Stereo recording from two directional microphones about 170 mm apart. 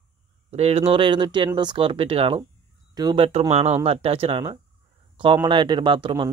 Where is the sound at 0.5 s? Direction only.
40° right (ahead or behind).